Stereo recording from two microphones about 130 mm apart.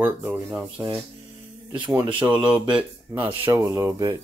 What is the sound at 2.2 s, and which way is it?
Speech, 10° right (ahead or behind).